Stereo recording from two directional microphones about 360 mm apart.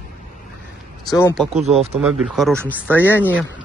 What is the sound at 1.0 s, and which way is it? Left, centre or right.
Speech, centre.